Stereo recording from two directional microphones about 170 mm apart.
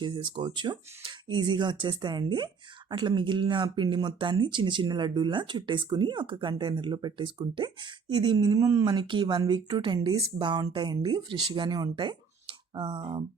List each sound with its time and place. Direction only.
0.0 s speech: 25° right (ahead or behind)